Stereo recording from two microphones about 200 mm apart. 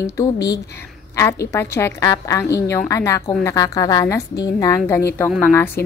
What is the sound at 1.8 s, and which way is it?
A woman's voice, 15° left (ahead or behind).